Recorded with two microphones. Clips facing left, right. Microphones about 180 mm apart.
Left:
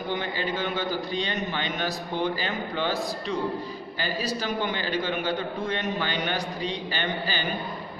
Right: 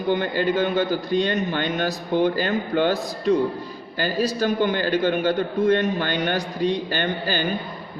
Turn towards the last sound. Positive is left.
turn(degrees=-50)  # may be behind; listen again after turning